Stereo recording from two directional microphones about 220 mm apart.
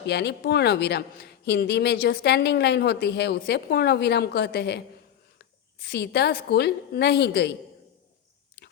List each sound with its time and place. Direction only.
0.1 s a woman's voice: 50° left (ahead or behind)